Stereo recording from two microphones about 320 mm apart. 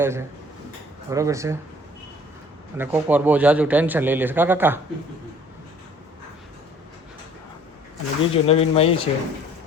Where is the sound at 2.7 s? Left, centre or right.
Centre.